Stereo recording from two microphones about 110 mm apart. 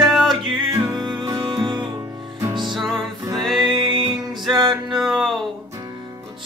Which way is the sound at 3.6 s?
45° right (ahead or behind).